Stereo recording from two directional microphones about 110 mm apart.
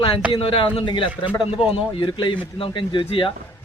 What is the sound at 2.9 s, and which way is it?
Speech, 50° left (ahead or behind).